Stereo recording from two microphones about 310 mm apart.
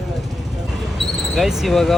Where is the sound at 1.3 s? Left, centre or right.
Centre.